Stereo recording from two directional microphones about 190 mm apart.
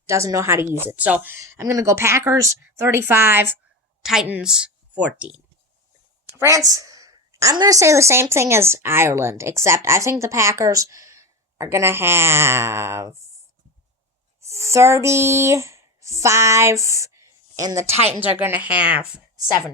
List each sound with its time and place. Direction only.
0.0 s a woman's voice: 15° right (ahead or behind)
14.4 s a woman's voice: 15° right (ahead or behind)
18.6 s speech: 30° left (ahead or behind)
18.9 s speech: 5° right (ahead or behind)